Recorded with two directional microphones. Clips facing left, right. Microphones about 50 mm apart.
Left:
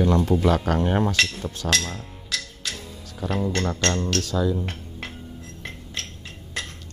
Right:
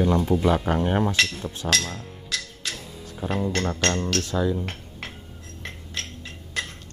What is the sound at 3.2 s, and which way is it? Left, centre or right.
Speech, right.